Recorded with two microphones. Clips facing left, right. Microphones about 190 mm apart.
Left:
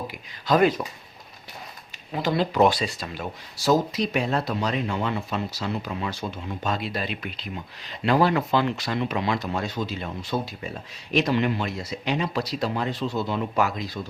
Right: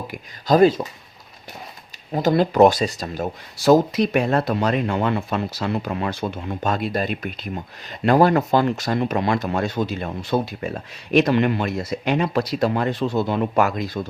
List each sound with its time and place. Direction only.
0.1 s speech: 40° right (ahead or behind)
2.1 s speech: 45° right (ahead or behind)
3.7 s speech: 55° right (ahead or behind)